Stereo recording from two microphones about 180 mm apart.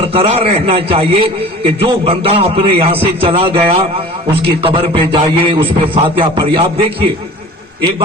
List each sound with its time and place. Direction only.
0.0 s a man's voice: 30° right (ahead or behind)